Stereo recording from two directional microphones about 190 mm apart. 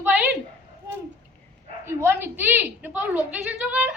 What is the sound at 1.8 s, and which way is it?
A woman's voice, 15° right (ahead or behind).